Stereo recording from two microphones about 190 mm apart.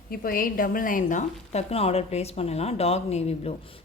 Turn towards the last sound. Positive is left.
turn(degrees=35)  # may be behind; listen again after turning